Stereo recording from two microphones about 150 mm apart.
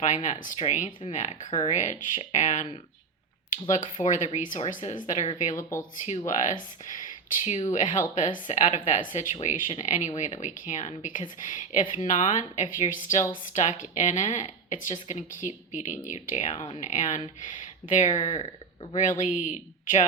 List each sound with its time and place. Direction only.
0.0 s speech: 55° left (ahead or behind)
1.5 s speech: 30° left (ahead or behind)
1.7 s speech: 55° left (ahead or behind)
3.7 s speech: 55° left (ahead or behind)